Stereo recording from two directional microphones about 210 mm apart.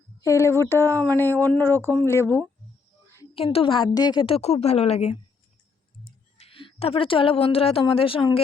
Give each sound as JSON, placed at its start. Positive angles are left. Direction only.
{"t": 0.2, "sound": "speech", "side_deg": 15}
{"t": 3.3, "sound": "a woman's voice", "side_deg": 25}
{"t": 6.3, "sound": "a woman's voice", "side_deg": 25}